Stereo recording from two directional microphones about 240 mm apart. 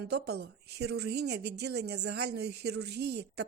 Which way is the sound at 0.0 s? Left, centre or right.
Right.